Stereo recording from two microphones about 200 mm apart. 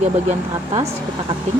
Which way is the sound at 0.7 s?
30° right (ahead or behind).